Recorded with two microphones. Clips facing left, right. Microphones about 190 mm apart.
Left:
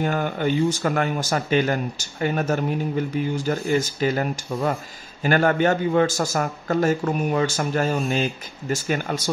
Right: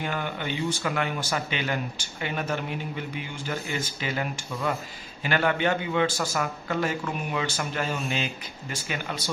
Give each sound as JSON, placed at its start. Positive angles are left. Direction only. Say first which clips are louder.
{"t": 0.0, "sound": "speech", "louder": "left 8 dB", "side_deg": 45}